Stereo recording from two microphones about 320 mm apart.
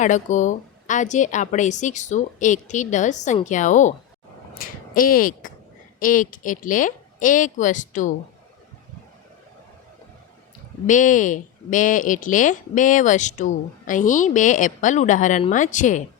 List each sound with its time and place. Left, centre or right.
0.0 s speech: left
10.8 s speech: left